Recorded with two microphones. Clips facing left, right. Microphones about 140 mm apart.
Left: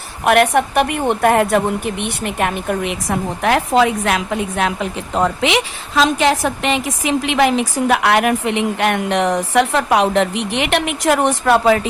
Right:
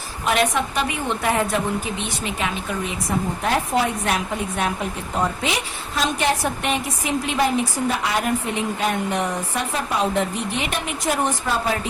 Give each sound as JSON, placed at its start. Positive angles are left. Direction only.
{"t": 0.3, "sound": "a woman's voice", "side_deg": 60}